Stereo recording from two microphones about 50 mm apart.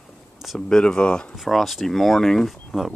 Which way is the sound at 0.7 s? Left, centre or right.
Centre.